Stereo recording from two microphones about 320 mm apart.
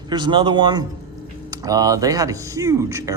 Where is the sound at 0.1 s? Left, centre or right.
Centre.